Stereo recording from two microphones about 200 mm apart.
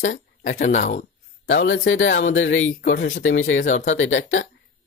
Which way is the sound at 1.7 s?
70° left (ahead or behind).